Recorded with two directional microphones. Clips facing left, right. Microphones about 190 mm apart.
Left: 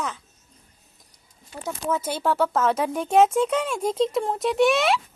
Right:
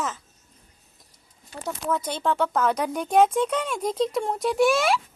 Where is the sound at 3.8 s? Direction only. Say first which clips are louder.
Left 1 dB; 25° left (ahead or behind).